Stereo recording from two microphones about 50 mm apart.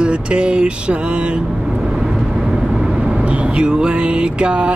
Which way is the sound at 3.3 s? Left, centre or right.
Right.